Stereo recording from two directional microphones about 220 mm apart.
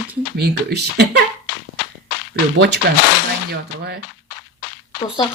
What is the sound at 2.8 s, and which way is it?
Speech, 50° right (ahead or behind).